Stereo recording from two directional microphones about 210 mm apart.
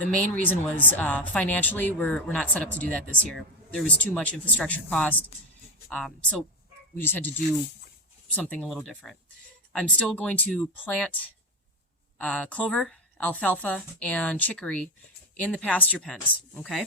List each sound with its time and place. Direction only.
0.0 s a woman's voice: 5° left (ahead or behind)
8.4 s a woman's voice: 5° left (ahead or behind)
12.2 s a woman's voice: 5° left (ahead or behind)